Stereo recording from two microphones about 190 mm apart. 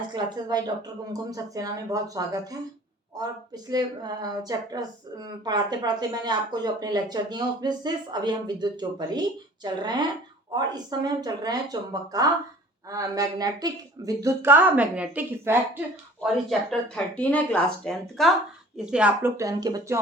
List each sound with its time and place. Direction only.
0.1 s speech: 25° right (ahead or behind)
16.2 s speech: centre (ahead or behind); by 20.0 s 20° right (ahead or behind)